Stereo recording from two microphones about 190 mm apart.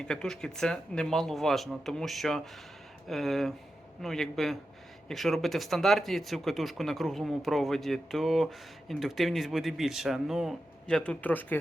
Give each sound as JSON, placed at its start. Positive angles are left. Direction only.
{"t": 0.0, "sound": "speech", "side_deg": 5}